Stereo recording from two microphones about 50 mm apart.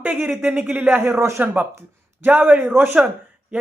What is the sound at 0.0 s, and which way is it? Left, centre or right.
Speech, right.